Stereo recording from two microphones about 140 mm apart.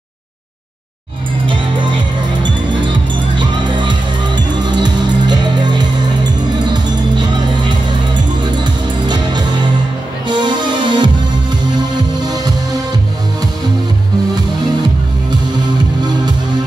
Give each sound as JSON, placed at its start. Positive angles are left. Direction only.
{"t": 1.4, "sound": "music", "side_deg": -35}
{"t": 12.2, "sound": "music", "side_deg": -30}